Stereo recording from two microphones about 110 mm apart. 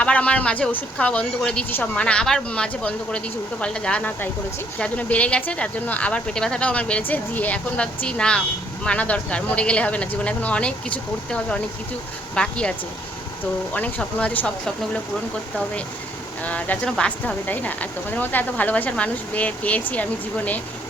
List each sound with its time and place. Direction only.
0.0 s speech: 10° left (ahead or behind)
16.4 s speech: 15° left (ahead or behind)